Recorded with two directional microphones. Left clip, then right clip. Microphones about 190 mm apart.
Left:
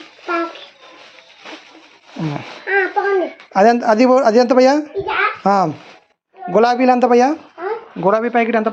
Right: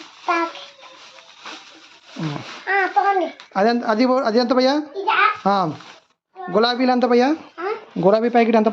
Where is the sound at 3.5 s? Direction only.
15° left (ahead or behind).